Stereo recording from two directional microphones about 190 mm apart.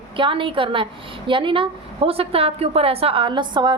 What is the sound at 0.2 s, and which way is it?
A woman's voice, 25° right (ahead or behind).